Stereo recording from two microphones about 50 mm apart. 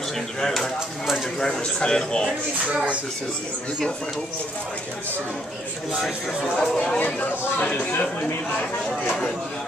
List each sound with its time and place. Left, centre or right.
0.4 s speech: centre
2.7 s speech: right
5.9 s speech: centre
6.5 s speech: centre
7.6 s speech: left